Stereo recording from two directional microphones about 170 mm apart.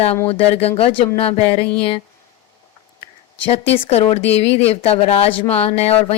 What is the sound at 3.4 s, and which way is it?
Speech, 35° left (ahead or behind).